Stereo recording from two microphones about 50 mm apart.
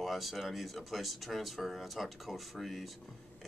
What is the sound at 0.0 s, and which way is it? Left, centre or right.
Speech, centre.